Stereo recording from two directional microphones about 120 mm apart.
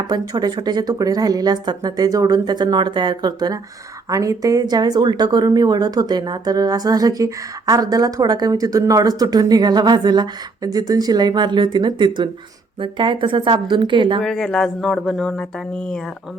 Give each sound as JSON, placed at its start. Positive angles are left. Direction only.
{"t": 0.1, "sound": "a woman's voice", "side_deg": -35}
{"t": 14.2, "sound": "speech", "side_deg": 5}